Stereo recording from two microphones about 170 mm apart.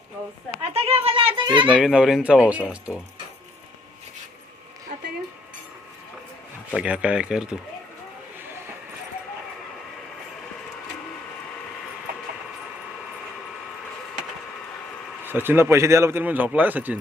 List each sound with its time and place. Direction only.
0.6 s a sound: 35° right (ahead or behind)
1.7 s speech: 5° right (ahead or behind)
6.7 s speech: 5° right (ahead or behind)
15.2 s a man's voice: 10° right (ahead or behind)